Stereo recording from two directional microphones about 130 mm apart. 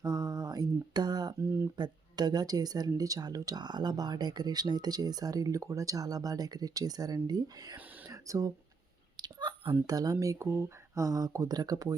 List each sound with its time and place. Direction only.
0.0 s mantra: 30° right (ahead or behind)
1.4 s speech: 20° right (ahead or behind)
1.7 s speech: 35° right (ahead or behind)
8.0 s a sound: 25° right (ahead or behind)
9.1 s whispering: 35° right (ahead or behind)
9.8 s speech: 30° right (ahead or behind)